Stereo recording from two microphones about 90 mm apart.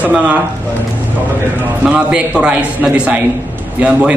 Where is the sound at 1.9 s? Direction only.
15° right (ahead or behind).